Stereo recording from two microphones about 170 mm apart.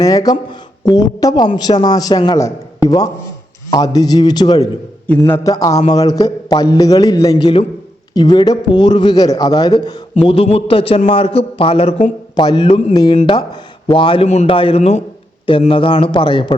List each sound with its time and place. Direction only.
0.0 s a man's voice: 20° left (ahead or behind)
5.0 s a man's voice: 15° left (ahead or behind)
10.2 s speech: 35° left (ahead or behind)